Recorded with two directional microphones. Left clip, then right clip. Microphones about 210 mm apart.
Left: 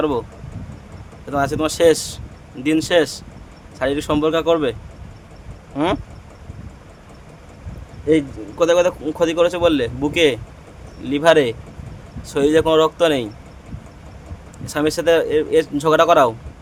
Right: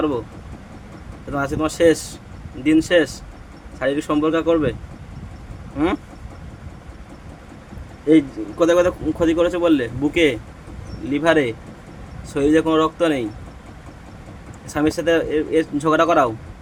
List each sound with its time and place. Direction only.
1.3 s speech: 15° left (ahead or behind)
5.7 s speech: 20° left (ahead or behind)
8.1 s speech: 5° left (ahead or behind)
14.7 s speech: 15° left (ahead or behind)